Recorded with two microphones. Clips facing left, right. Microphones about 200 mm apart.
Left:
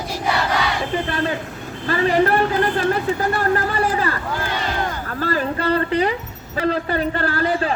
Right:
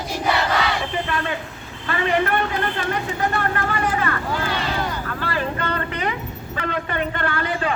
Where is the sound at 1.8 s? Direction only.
35° left (ahead or behind).